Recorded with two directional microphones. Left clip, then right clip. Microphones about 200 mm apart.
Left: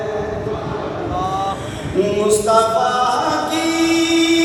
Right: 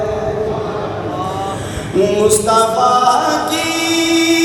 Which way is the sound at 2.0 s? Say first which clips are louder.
Right 3 dB; 55° right (ahead or behind).